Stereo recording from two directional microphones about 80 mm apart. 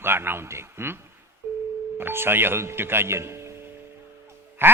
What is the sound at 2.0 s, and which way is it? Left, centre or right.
Speech, right.